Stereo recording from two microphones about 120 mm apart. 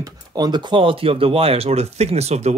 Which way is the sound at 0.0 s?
30° right (ahead or behind).